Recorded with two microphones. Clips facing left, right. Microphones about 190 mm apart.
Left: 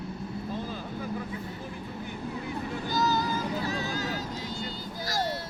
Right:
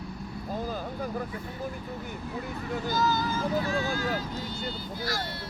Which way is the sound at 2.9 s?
40° left (ahead or behind).